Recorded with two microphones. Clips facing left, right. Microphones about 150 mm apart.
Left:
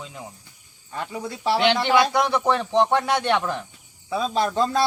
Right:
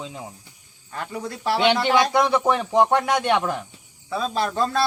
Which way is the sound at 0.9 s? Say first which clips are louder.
Even; 5° left (ahead or behind).